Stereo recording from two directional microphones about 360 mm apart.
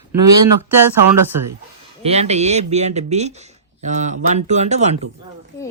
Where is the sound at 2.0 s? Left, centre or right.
Centre.